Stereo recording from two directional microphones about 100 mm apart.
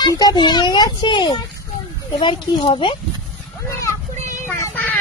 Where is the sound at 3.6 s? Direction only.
30° left (ahead or behind).